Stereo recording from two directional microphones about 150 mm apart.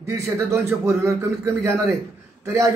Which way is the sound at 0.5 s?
15° right (ahead or behind).